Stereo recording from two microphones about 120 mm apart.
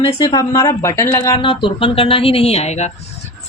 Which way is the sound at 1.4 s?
45° left (ahead or behind).